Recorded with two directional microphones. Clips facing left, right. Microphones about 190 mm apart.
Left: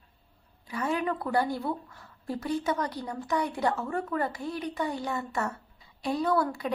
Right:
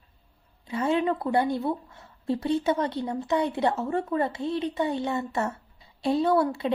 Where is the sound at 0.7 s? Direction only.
25° right (ahead or behind).